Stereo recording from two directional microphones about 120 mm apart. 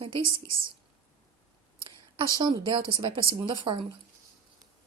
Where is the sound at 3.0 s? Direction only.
40° right (ahead or behind).